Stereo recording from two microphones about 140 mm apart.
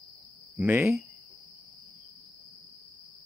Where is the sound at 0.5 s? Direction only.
15° right (ahead or behind).